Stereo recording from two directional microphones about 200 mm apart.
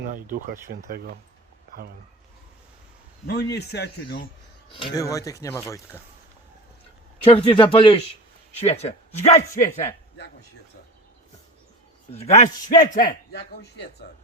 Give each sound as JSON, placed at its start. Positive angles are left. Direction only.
{"t": 0.1, "sound": "speech", "side_deg": -40}
{"t": 3.2, "sound": "speech", "side_deg": 55}
{"t": 4.7, "sound": "speech", "side_deg": 25}
{"t": 7.3, "sound": "speech", "side_deg": 25}
{"t": 12.1, "sound": "speech", "side_deg": 35}
{"t": 12.8, "sound": "a man's voice", "side_deg": 45}